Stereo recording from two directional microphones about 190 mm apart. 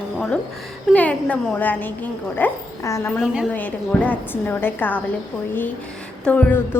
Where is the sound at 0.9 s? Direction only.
10° left (ahead or behind).